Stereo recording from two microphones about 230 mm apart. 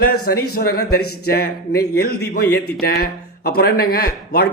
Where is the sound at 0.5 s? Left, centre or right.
Left.